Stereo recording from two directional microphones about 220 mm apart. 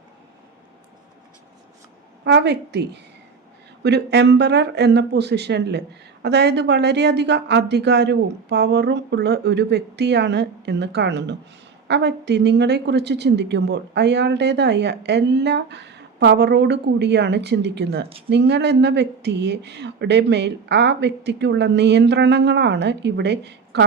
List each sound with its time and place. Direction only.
2.2 s a woman's voice: 50° right (ahead or behind)
3.8 s a woman's voice: 50° right (ahead or behind)